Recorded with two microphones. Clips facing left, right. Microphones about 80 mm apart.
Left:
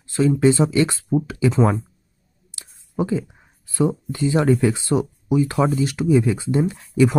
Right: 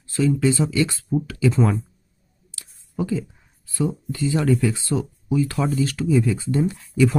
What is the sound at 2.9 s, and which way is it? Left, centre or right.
Speech, left.